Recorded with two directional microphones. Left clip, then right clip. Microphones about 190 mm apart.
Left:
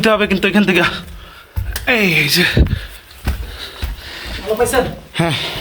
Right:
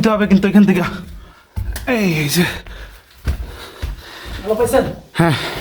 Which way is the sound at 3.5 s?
40° right (ahead or behind).